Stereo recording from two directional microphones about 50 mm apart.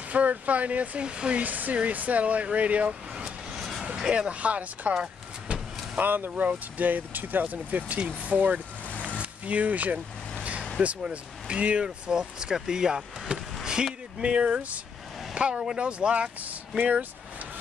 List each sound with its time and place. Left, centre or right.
0.1 s speech: right
1.4 s speech: right
3.5 s vehicle: centre
3.8 s vehicle: centre
4.3 s speech: right
5.9 s speech: right
11.0 s speech: centre